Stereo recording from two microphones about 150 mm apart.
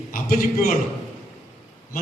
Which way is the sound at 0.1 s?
70° left (ahead or behind).